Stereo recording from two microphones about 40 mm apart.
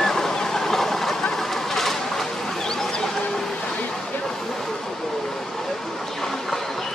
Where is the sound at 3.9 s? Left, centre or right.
Centre.